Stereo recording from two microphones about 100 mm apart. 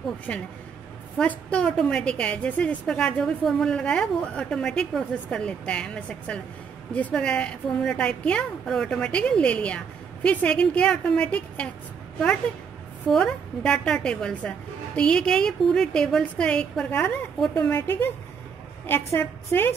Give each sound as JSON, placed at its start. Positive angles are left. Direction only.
{"t": 0.3, "sound": "a woman's voice", "side_deg": 15}
{"t": 13.1, "sound": "a woman's voice", "side_deg": 10}
{"t": 17.6, "sound": "a woman's voice", "side_deg": 15}
{"t": 19.1, "sound": "a woman's voice", "side_deg": 20}